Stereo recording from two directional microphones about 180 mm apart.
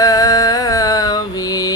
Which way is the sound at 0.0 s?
20° left (ahead or behind).